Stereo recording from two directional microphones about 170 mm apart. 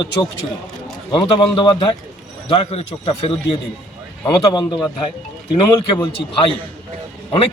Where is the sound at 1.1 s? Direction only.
30° left (ahead or behind).